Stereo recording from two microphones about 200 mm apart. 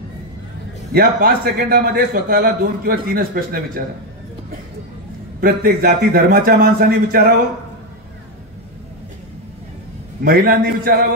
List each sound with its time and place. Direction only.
0.9 s a man's voice: 50° right (ahead or behind)
5.4 s a man's voice: 50° right (ahead or behind)
10.2 s a man's voice: 50° right (ahead or behind)